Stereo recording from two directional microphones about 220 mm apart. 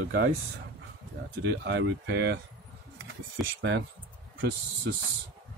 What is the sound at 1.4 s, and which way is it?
Speech, 55° right (ahead or behind).